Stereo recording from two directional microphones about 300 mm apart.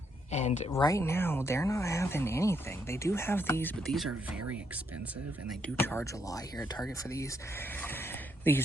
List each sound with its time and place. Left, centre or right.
0.3 s speech: left
0.7 s speech: centre
5.5 s speech: centre